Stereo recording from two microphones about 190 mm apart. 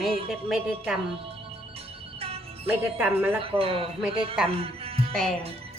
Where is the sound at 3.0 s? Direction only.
10° right (ahead or behind).